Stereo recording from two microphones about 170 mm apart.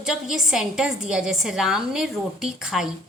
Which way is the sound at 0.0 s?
5° right (ahead or behind).